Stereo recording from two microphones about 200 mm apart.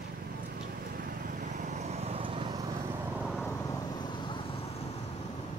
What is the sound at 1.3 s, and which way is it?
Vehicle, 40° right (ahead or behind).